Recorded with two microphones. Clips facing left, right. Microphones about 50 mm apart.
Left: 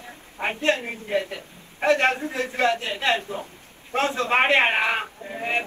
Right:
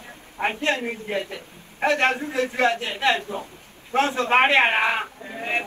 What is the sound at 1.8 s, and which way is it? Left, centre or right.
A man's voice, right.